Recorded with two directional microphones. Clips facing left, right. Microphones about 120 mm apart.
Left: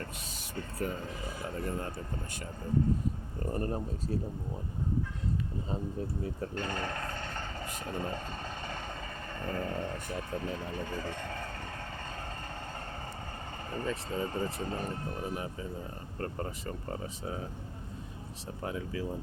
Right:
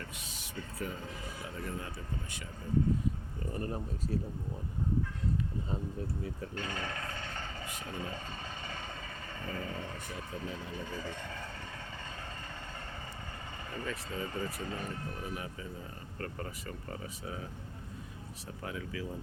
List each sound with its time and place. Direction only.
0.0 s speech: 45° left (ahead or behind)
3.4 s speech: 40° left (ahead or behind)
4.1 s speech: 30° left (ahead or behind)
6.2 s speech: 40° left (ahead or behind)
13.7 s speech: 35° left (ahead or behind)
18.6 s speech: 30° left (ahead or behind)